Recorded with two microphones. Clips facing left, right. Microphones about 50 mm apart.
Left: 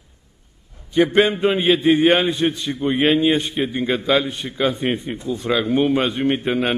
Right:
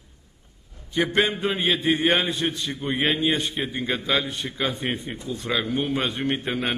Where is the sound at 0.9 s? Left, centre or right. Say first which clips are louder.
Left 6 dB; left.